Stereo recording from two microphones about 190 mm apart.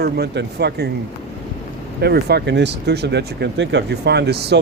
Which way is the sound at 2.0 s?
60° right (ahead or behind).